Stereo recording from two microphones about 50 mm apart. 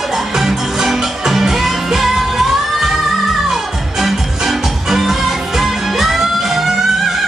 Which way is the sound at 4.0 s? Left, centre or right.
Centre.